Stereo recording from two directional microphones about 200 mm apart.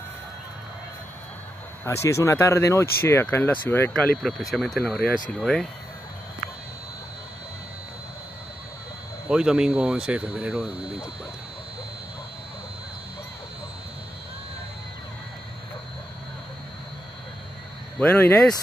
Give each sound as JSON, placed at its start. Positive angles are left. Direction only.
{"t": 1.9, "sound": "speech", "side_deg": 15}
{"t": 9.3, "sound": "speech", "side_deg": -5}
{"t": 17.9, "sound": "speech", "side_deg": 10}